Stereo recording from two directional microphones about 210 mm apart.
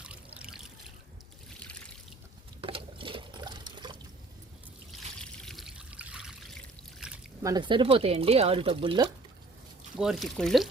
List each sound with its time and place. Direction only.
0.0 s trickle: 5° right (ahead or behind)
2.6 s liquid: 25° right (ahead or behind)
4.9 s trickle: centre (ahead or behind)
7.4 s speech: 20° right (ahead or behind)
10.0 s speech: centre (ahead or behind)